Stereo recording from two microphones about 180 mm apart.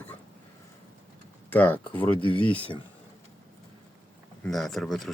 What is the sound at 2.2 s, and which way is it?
Speech, 30° left (ahead or behind).